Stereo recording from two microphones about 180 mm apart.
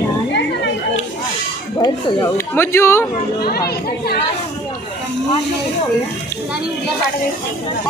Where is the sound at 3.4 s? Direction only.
60° left (ahead or behind).